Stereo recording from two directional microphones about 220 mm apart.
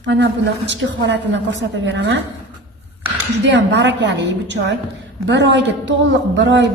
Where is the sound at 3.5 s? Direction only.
55° right (ahead or behind).